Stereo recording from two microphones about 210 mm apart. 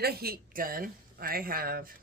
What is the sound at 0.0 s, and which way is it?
Speech, 45° right (ahead or behind).